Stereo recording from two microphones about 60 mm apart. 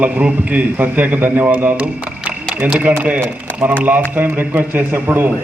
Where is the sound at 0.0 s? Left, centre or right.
Right.